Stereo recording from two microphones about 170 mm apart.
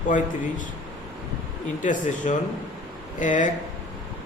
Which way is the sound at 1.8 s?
45° left (ahead or behind).